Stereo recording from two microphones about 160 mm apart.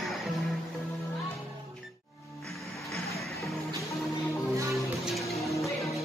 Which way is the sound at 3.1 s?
Centre (ahead or behind).